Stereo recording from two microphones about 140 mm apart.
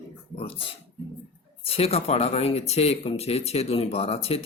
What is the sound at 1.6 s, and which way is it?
Speech, 45° left (ahead or behind).